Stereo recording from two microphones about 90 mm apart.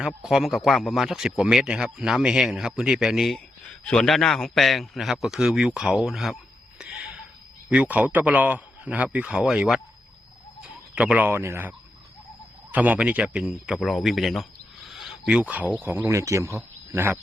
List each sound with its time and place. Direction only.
0.2 s speech: 5° right (ahead or behind)
6.7 s a sound: 10° right (ahead or behind)
7.7 s a man's voice: 15° right (ahead or behind)
10.9 s a man's voice: 15° right (ahead or behind)
12.7 s a man's voice: 15° right (ahead or behind)
13.4 s speech: centre (ahead or behind)
14.8 s a sound: centre (ahead or behind)
15.8 s a man's voice: 25° right (ahead or behind)
16.0 s a man's voice: 35° right (ahead or behind)